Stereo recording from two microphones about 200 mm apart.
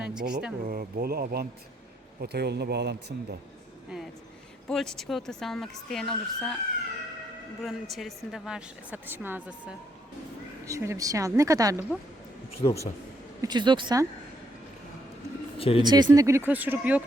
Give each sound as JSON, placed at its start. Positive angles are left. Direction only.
{"t": 0.0, "sound": "speech", "side_deg": -5}
{"t": 0.6, "sound": "speech", "side_deg": -45}
{"t": 3.8, "sound": "a woman's voice", "side_deg": 0}
{"t": 7.6, "sound": "a woman's voice", "side_deg": 0}
{"t": 12.6, "sound": "speech", "side_deg": 15}
{"t": 13.4, "sound": "speech", "side_deg": -20}
{"t": 15.5, "sound": "speech", "side_deg": 30}
{"t": 15.8, "sound": "speech", "side_deg": -20}